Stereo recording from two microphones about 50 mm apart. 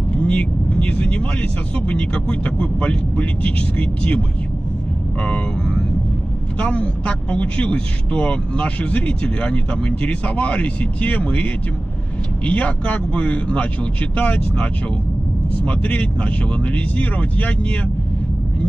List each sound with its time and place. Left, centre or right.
0.1 s speech: left
6.6 s speech: left